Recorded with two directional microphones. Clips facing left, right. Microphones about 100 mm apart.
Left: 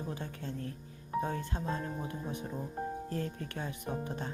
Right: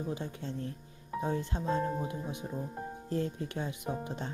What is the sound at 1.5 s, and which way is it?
Speech, 20° right (ahead or behind).